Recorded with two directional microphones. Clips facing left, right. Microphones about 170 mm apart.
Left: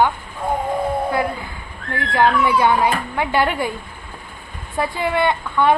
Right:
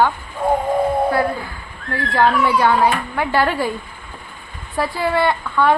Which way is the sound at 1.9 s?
20° left (ahead or behind).